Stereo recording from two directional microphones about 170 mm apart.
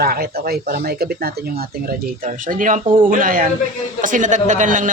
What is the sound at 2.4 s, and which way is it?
A man's voice, 50° right (ahead or behind).